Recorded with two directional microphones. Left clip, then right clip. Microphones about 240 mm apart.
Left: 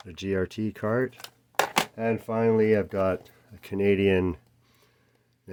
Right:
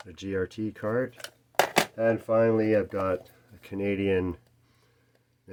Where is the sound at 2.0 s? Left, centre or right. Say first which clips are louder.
Right 3 dB; left.